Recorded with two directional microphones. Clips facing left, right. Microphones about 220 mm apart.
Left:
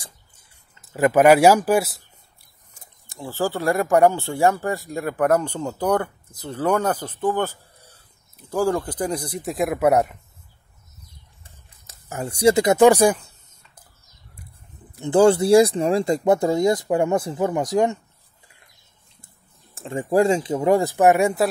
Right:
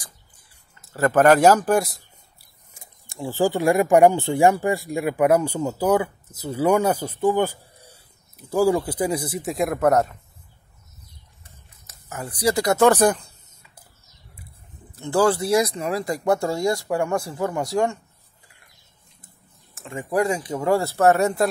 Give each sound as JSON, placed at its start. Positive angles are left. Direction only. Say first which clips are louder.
{"t": 0.7, "sound": "speech", "louder": "left 2 dB", "side_deg": 15}
{"t": 2.7, "sound": "speech", "louder": "right 2 dB", "side_deg": -10}
{"t": 11.4, "sound": "speech", "louder": "right 1 dB", "side_deg": 30}
{"t": 15.0, "sound": "speech", "louder": "left 4 dB", "side_deg": 20}
{"t": 19.2, "sound": "speech", "louder": "right 1 dB", "side_deg": 30}